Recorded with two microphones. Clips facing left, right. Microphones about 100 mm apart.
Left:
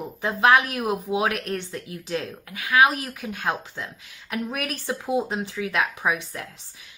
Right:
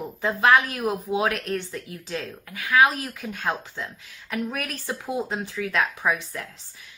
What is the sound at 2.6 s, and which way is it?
Speech, 15° left (ahead or behind).